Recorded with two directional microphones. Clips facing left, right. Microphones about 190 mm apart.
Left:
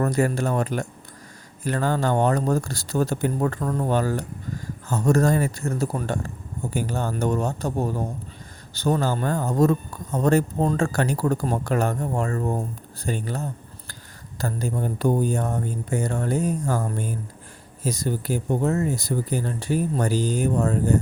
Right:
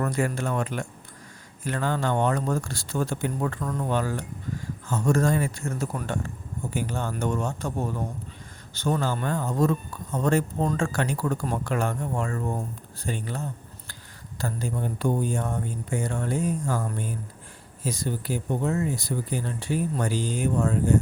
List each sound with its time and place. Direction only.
0.0 s speech: 40° left (ahead or behind)